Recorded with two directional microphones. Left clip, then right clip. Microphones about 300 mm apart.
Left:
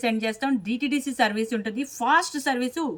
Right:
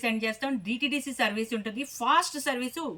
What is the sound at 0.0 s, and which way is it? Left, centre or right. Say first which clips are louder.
A woman's voice: left 4 dB; centre.